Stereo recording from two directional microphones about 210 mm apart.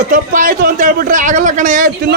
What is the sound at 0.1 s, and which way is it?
A man's voice, 40° right (ahead or behind).